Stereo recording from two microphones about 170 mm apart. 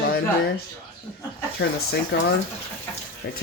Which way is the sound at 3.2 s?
70° left (ahead or behind).